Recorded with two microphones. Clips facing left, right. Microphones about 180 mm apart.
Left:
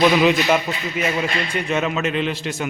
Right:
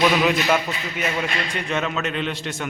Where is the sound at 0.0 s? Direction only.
5° left (ahead or behind).